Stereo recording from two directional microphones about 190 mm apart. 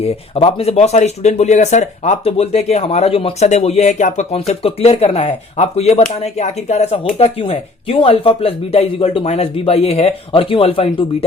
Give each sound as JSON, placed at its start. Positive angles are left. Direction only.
{"t": 0.0, "sound": "speech", "side_deg": 35}